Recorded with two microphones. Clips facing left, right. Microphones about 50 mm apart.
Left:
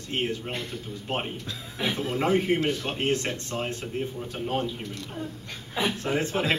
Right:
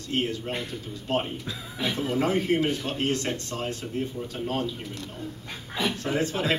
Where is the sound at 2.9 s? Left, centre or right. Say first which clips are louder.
Even; left.